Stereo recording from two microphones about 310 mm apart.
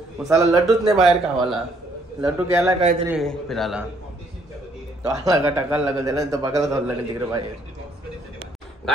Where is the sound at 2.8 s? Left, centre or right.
Centre.